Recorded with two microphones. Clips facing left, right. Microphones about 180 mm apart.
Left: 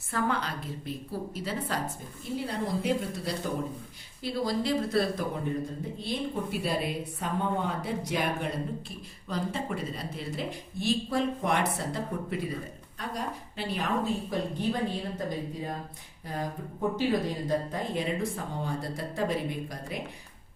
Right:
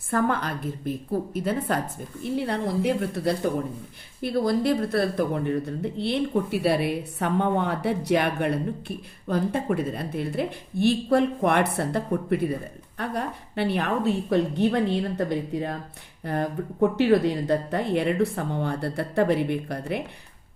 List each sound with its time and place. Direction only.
0.1 s a woman's voice: 50° right (ahead or behind)